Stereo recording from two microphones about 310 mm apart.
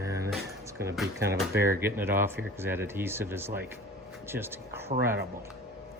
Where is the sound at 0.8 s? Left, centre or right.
Centre.